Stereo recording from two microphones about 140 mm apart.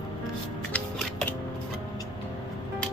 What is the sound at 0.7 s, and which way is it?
Music, 10° left (ahead or behind).